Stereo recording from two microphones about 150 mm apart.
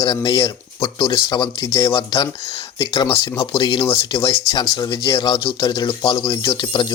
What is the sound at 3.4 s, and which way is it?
Speech, 40° left (ahead or behind).